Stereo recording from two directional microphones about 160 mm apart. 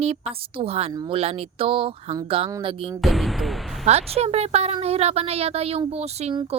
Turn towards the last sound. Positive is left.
turn(degrees=-40)  # may be behind; listen again after turning